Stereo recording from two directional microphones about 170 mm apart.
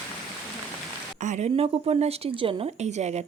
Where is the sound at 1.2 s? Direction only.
45° right (ahead or behind).